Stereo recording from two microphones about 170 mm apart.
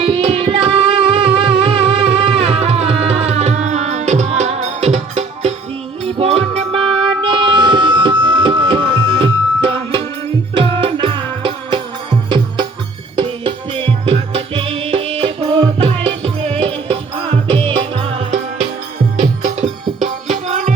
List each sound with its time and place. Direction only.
0.0 s music: 35° right (ahead or behind)
13.1 s music: 30° right (ahead or behind)
19.5 s music: 45° right (ahead or behind)